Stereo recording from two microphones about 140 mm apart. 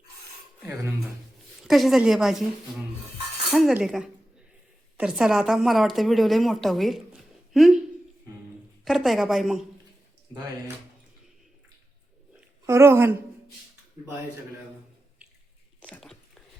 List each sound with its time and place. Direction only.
1.6 s speech: centre (ahead or behind)
3.5 s speech: centre (ahead or behind)
8.8 s speech: centre (ahead or behind)
12.6 s a woman's voice: 20° right (ahead or behind)
15.9 s a sound: centre (ahead or behind)